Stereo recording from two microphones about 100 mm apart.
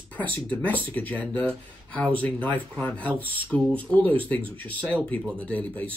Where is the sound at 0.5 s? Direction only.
15° left (ahead or behind).